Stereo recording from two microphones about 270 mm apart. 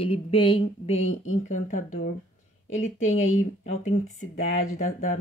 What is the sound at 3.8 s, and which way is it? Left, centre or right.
Speech, left.